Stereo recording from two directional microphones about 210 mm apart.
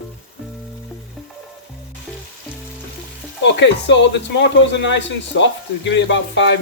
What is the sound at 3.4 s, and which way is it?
Speech, 60° left (ahead or behind).